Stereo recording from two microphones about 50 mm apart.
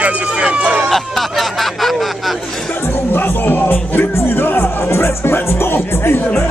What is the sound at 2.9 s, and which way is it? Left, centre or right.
Music, left.